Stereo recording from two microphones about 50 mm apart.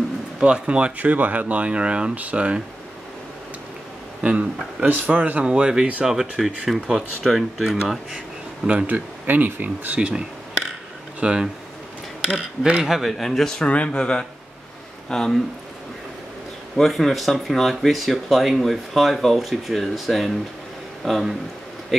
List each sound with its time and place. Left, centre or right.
0.4 s speech: right
4.2 s speech: right
4.8 s speech: right; by 5.9 s centre
6.0 s speech: centre
8.6 s speech: right
9.9 s speech: centre
12.8 s speech: centre
13.2 s speech: centre
13.7 s speech: left
16.7 s speech: centre